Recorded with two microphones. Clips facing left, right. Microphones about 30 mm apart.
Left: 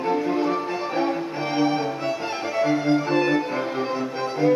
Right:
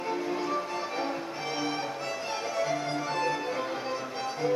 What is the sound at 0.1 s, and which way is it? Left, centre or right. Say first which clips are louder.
Music: left 8 dB; left.